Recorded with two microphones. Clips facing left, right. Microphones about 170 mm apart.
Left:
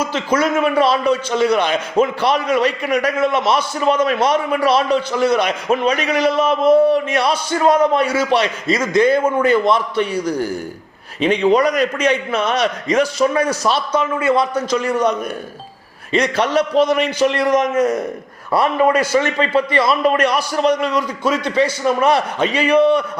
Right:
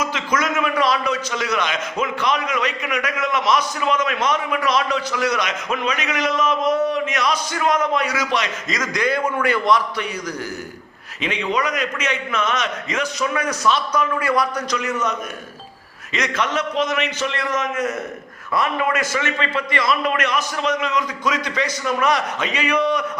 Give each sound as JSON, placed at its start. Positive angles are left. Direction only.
{"t": 0.0, "sound": "a man's voice", "side_deg": 30}
{"t": 16.1, "sound": "a man's voice", "side_deg": 30}